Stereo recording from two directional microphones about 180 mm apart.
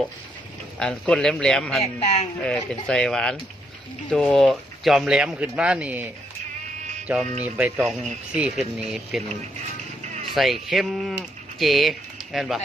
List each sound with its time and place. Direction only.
0.8 s speech: 5° left (ahead or behind)
1.8 s speech: 35° left (ahead or behind)
2.4 s speech: 5° left (ahead or behind)
7.1 s speech: 10° right (ahead or behind)
10.3 s speech: centre (ahead or behind)